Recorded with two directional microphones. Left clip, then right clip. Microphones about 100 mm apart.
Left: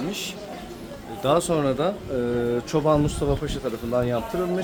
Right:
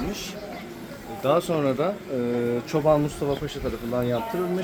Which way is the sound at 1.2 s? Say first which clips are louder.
Left 1 dB; 45° left (ahead or behind).